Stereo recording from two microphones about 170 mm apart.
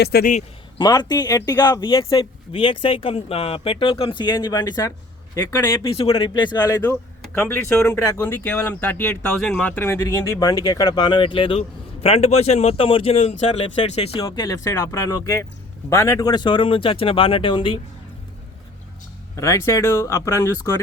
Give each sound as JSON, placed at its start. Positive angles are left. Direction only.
{"t": 0.0, "sound": "a man's voice", "side_deg": 65}
{"t": 0.8, "sound": "speech", "side_deg": 25}
{"t": 14.3, "sound": "speech", "side_deg": 20}
{"t": 19.4, "sound": "speech", "side_deg": 20}